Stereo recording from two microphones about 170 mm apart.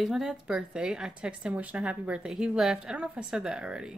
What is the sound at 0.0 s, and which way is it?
Speech, centre (ahead or behind).